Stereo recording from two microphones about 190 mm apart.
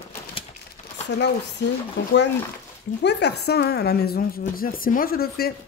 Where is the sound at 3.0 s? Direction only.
60° left (ahead or behind).